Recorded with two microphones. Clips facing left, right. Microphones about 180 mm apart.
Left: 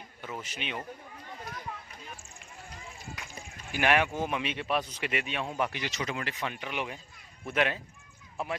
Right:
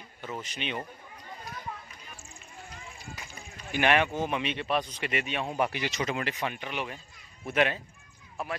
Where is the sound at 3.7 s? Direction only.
5° left (ahead or behind).